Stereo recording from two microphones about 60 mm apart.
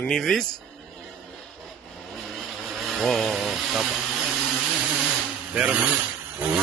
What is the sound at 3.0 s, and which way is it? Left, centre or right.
Chainsaw, centre.